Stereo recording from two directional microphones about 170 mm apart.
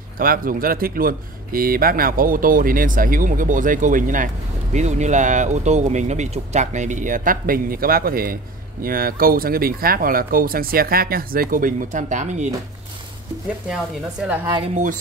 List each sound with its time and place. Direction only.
0.2 s speech: 55° right (ahead or behind)
14.2 s a woman's voice: 10° right (ahead or behind)